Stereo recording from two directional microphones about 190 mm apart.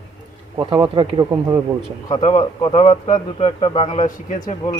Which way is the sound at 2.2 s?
35° left (ahead or behind).